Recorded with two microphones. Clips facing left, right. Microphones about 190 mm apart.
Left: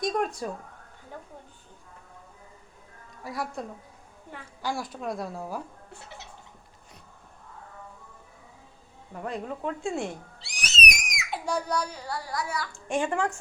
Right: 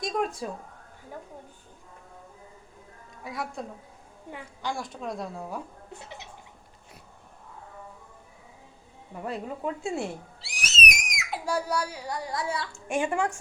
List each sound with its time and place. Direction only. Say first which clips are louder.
0.0 s speech: left 1 dB; centre (ahead or behind)
3.2 s speech: left 1 dB; centre (ahead or behind)
5.9 s a sound: right 2 dB; 20° right (ahead or behind)
9.2 s speech: even; 5° right (ahead or behind); by 12.8 s 25° right (ahead or behind)
12.9 s speech: even; 10° right (ahead or behind)